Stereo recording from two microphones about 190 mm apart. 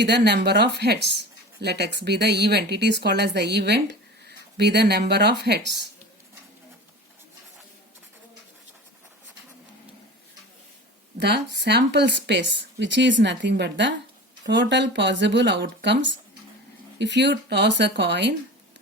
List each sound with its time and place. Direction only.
0.0 s speech: 60° right (ahead or behind)
11.2 s speech: 60° right (ahead or behind)